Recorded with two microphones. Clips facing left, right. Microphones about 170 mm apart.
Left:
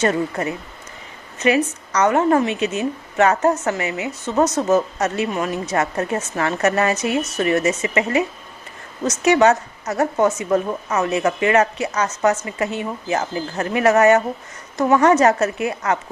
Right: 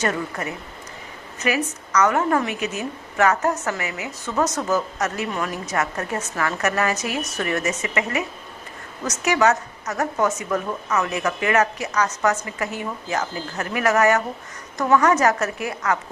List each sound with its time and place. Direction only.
0.0 s a woman's voice: 25° left (ahead or behind)